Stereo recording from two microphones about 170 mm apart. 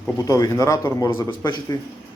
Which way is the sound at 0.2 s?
20° left (ahead or behind).